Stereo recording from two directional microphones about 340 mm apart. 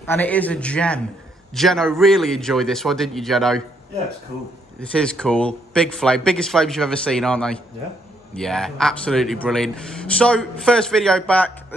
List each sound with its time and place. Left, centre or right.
0.0 s speech: centre
4.9 s speech: centre